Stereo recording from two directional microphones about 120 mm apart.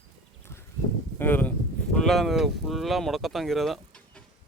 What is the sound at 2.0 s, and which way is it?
Speech, centre (ahead or behind).